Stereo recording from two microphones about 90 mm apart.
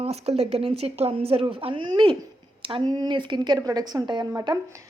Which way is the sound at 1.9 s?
55° right (ahead or behind).